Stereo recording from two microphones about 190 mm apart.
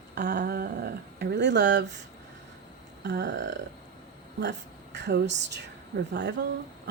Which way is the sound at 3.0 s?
65° right (ahead or behind).